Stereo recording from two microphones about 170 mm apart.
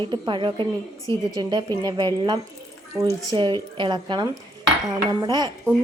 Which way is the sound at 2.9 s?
15° right (ahead or behind).